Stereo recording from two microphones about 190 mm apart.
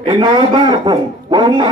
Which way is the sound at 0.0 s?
25° right (ahead or behind).